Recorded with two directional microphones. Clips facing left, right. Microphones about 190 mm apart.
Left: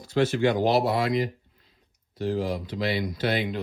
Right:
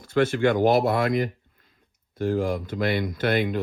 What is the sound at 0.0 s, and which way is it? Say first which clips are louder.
Speech: right 2 dB; 55° right (ahead or behind).